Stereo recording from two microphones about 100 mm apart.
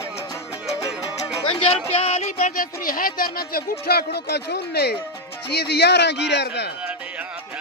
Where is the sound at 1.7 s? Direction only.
90° left.